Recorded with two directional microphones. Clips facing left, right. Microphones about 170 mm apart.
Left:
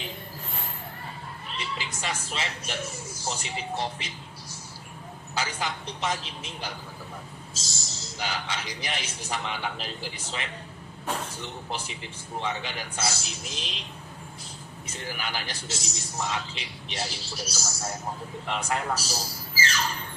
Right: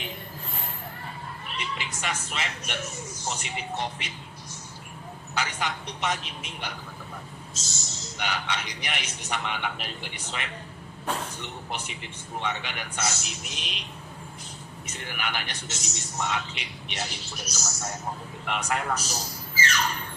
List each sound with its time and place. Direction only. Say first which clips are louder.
1.5 s a man's voice: even; 30° left (ahead or behind)
5.3 s a man's voice: even; 30° left (ahead or behind)
7.9 s a man's voice: right 1 dB; 30° left (ahead or behind)
14.8 s a man's voice: even; 30° left (ahead or behind)